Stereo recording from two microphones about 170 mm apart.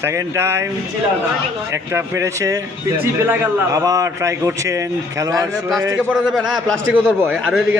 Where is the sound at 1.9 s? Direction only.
15° right (ahead or behind).